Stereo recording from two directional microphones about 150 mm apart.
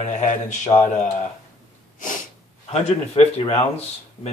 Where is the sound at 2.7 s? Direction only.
45° left (ahead or behind).